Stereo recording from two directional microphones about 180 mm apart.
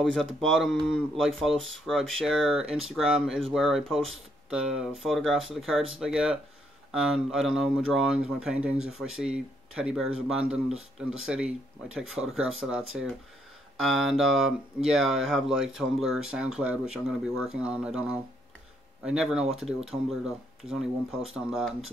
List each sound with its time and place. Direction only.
0.0 s speech: 5° left (ahead or behind)